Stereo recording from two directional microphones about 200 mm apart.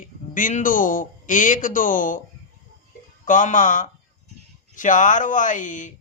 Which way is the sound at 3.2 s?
40° left (ahead or behind).